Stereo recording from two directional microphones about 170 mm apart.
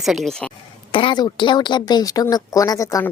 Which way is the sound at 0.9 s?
30° left (ahead or behind).